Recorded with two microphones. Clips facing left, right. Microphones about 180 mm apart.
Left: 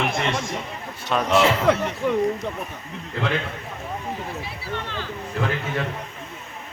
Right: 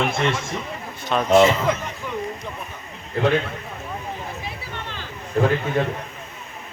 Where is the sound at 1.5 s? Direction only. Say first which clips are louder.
Left 2 dB; 65° left (ahead or behind).